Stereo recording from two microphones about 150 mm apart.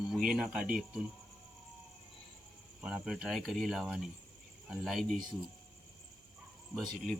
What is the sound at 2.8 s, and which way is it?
Speech, 5° right (ahead or behind).